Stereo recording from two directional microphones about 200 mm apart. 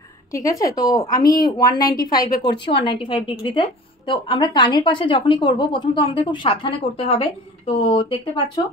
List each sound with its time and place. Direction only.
0.3 s a woman's voice: 15° left (ahead or behind)